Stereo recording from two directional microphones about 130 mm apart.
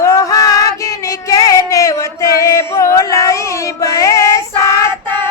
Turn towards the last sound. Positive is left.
turn(degrees=25)  # may be behind; listen again after turning